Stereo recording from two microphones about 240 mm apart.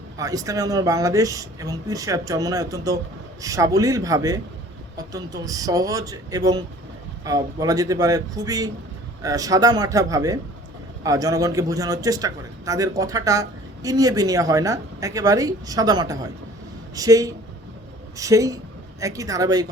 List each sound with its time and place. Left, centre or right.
0.2 s a man's voice: centre